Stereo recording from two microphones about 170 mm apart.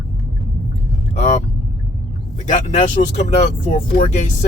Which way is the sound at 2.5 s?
45° left (ahead or behind).